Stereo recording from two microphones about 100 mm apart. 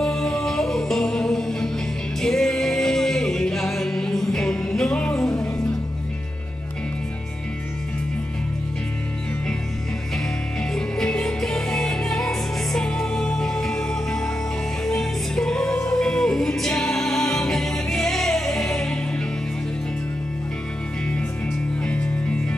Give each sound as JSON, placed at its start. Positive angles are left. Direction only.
{"t": 0.0, "sound": "music", "side_deg": 5}
{"t": 10.7, "sound": "music", "side_deg": 5}
{"t": 21.8, "sound": "music", "side_deg": 15}